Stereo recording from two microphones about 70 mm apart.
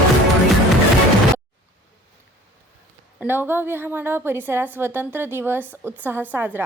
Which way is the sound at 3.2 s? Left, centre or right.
Right.